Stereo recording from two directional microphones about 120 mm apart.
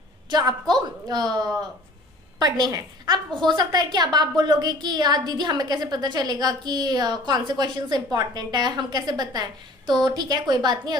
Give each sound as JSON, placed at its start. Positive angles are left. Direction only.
{"t": 0.3, "sound": "a woman's voice", "side_deg": -35}